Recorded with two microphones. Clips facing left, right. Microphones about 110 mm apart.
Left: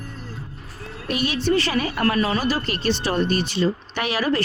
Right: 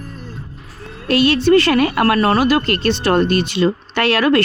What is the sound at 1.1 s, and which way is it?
Speech, 80° right.